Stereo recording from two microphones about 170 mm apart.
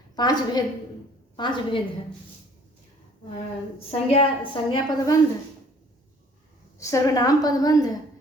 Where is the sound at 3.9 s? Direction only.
35° left (ahead or behind).